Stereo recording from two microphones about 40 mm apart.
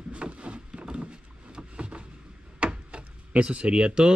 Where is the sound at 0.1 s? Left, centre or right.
Right.